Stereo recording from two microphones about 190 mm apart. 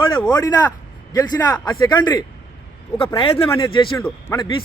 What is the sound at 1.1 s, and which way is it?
A man's voice, 20° left (ahead or behind).